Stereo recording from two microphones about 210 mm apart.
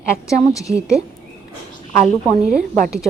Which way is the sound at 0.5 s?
15° left (ahead or behind).